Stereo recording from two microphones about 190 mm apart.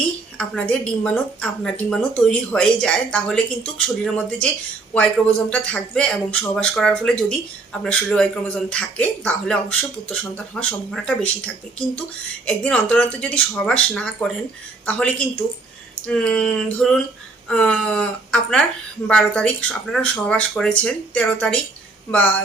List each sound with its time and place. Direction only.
0.0 s speech: 5° left (ahead or behind)